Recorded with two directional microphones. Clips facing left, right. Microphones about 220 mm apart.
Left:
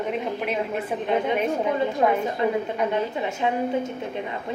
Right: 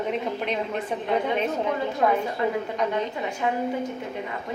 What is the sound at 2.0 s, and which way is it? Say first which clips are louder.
Speech: even; 20° left (ahead or behind).